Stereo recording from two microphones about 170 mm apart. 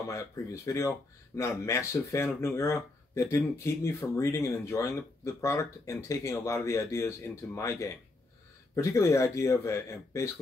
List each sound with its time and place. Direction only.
0.0 s speech: 20° left (ahead or behind)